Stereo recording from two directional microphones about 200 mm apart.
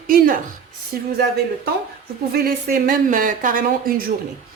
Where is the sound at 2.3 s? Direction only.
50° right (ahead or behind).